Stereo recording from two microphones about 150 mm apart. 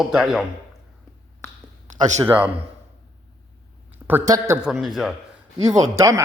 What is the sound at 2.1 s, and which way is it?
Speech, 10° right (ahead or behind).